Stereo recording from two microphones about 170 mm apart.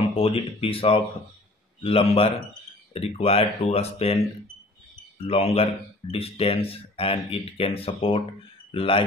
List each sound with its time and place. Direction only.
0.1 s speech: 35° left (ahead or behind)
5.2 s speech: 35° left (ahead or behind)